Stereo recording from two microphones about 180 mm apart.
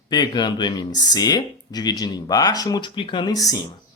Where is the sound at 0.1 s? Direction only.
25° left (ahead or behind).